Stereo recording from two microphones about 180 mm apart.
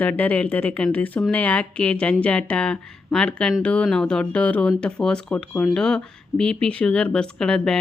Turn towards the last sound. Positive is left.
turn(degrees=5)  # may be behind; listen again after turning